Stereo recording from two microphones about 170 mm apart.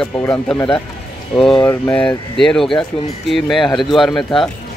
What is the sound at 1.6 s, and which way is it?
Speech, 10° left (ahead or behind).